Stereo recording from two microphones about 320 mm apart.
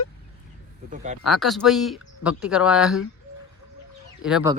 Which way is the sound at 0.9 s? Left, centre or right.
Right.